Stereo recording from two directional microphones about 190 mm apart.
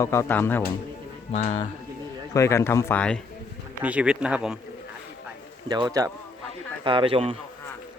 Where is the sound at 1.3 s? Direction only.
35° left (ahead or behind).